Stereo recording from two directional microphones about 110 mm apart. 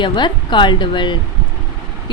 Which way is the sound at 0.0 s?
45° left (ahead or behind).